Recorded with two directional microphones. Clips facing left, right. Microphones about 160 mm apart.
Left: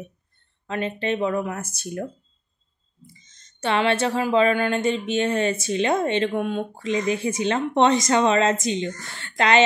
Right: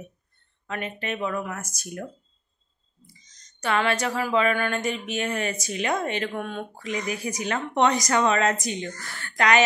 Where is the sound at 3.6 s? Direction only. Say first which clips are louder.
Left 3 dB; 25° left (ahead or behind).